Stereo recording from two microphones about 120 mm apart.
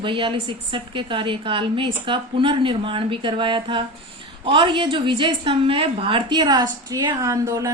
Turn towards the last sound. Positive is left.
turn(degrees=-25)  # may be behind; listen again after turning